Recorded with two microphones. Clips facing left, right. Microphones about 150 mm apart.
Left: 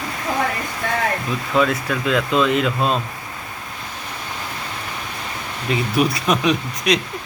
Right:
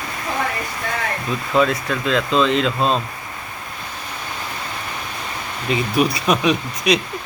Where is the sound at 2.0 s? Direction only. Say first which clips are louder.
Even; 10° left (ahead or behind).